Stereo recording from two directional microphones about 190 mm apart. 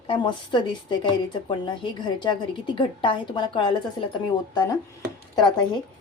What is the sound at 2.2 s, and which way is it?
A woman's voice, 25° left (ahead or behind).